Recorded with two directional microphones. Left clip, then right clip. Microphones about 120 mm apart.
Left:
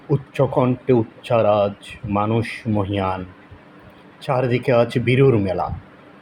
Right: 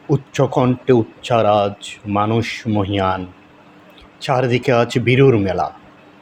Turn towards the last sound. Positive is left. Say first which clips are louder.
# right 3 dB
turn(degrees=-65)  # may be behind; listen again after turning